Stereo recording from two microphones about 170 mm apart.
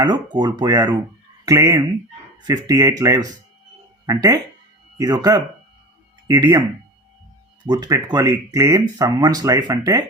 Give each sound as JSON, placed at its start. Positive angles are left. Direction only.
{"t": 0.3, "sound": "speech", "side_deg": -25}
{"t": 7.6, "sound": "speech", "side_deg": -25}